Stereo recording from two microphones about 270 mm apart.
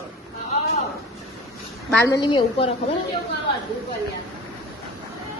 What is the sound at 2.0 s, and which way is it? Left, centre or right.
Speech, centre.